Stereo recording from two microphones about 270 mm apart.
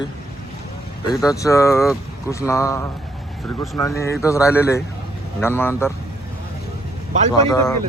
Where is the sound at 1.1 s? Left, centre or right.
Centre.